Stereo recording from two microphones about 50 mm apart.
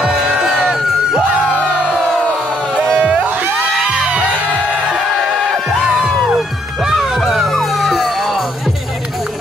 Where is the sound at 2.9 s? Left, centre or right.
Right.